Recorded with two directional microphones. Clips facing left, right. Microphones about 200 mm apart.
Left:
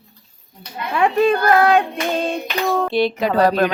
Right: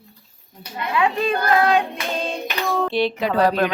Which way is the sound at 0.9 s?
45° left (ahead or behind).